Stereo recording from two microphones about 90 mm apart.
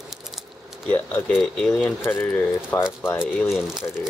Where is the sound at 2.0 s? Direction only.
25° left (ahead or behind).